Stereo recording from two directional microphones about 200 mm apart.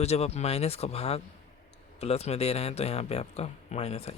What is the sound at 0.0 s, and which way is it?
Speech, 30° left (ahead or behind).